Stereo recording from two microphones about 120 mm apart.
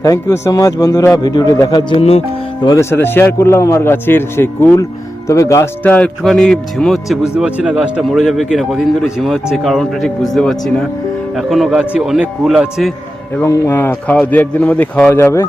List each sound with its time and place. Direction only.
0.0 s speech: 25° left (ahead or behind)
2.0 s speech: 55° left (ahead or behind)
2.9 s speech: 20° left (ahead or behind)
5.8 s a man's voice: 15° left (ahead or behind)
6.2 s speech: 5° left (ahead or behind)
13.4 s a man's voice: 20° left (ahead or behind)